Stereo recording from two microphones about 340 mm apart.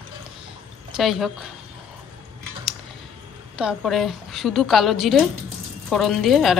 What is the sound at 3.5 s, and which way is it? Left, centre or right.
A woman's voice, centre.